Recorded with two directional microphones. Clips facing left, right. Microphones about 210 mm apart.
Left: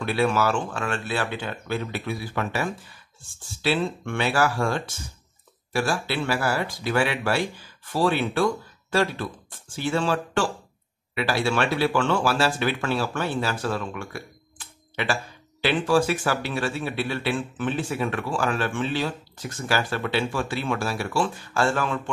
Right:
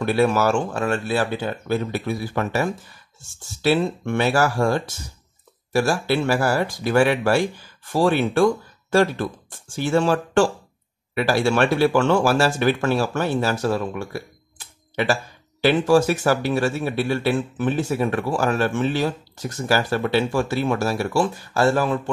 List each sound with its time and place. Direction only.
0.0 s a man's voice: 40° right (ahead or behind)